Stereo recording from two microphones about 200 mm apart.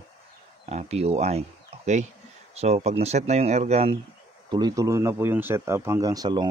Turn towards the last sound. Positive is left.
turn(degrees=-20)  # may be behind; listen again after turning